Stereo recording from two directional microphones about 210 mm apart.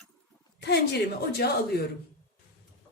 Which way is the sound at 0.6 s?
50° left (ahead or behind).